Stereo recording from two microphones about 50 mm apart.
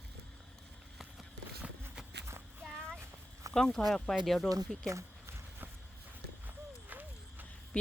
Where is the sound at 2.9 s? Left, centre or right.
Right.